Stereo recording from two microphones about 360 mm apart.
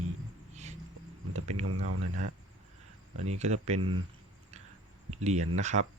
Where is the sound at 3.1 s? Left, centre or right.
Centre.